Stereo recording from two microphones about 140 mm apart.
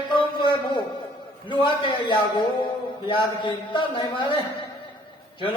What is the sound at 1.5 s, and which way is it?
A man's voice, 35° left (ahead or behind).